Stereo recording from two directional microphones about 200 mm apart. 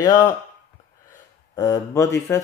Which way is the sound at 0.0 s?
20° left (ahead or behind).